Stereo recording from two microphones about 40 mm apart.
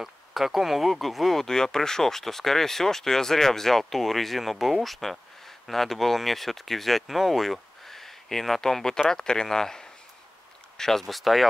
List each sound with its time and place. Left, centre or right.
0.0 s speech: centre